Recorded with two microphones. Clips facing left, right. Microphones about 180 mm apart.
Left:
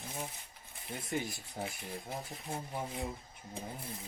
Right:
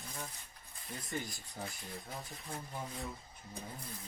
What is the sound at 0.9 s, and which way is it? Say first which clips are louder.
Speech: left 4 dB; 25° left (ahead or behind).